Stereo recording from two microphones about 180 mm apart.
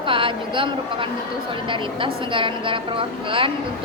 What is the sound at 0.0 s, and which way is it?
Speech, 30° right (ahead or behind).